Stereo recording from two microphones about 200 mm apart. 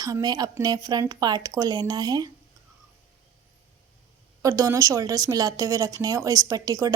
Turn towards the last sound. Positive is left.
turn(degrees=-15)  # may be behind; listen again after turning